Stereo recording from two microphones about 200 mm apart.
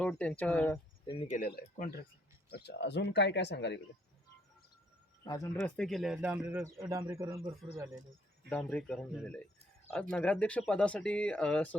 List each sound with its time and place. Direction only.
0.0 s speech: 5° left (ahead or behind)
1.3 s speech: 45° left (ahead or behind); by 3.8 s 60° left (ahead or behind)
5.5 s speech: 5° left (ahead or behind)
6.4 s a man's voice: 15° right (ahead or behind)
8.4 s speech: 5° left (ahead or behind)